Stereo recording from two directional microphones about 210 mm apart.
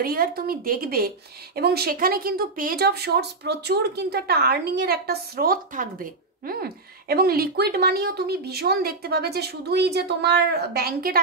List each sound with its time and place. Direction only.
0.0 s a woman's voice: 45° right (ahead or behind)